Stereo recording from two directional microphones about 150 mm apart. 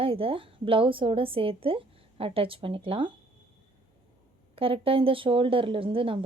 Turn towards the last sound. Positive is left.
turn(degrees=-35)  # may be behind; listen again after turning